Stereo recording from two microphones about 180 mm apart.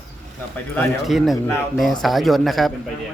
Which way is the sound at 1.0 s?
Centre (ahead or behind).